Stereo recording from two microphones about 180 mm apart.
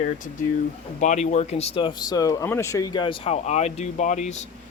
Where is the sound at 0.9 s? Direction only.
40° left (ahead or behind).